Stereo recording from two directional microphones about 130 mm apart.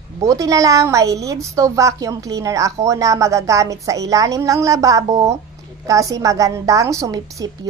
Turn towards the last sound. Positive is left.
turn(degrees=-25)  # may be behind; listen again after turning